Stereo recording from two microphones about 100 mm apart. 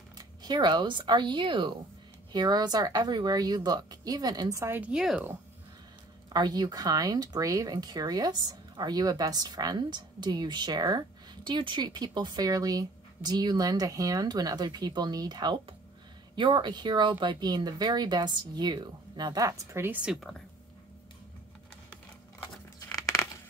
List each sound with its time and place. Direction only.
0.4 s a woman's voice: 45° right (ahead or behind)
4.6 s a woman's voice: 20° right (ahead or behind)
4.9 s speech: 5° right (ahead or behind)
6.3 s speech: 45° right (ahead or behind); by 20.0 s 25° right (ahead or behind)
20.1 s speech: centre (ahead or behind)
22.8 s a sound: 30° left (ahead or behind)